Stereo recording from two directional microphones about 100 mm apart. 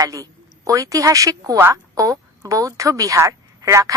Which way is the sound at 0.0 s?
35° right (ahead or behind).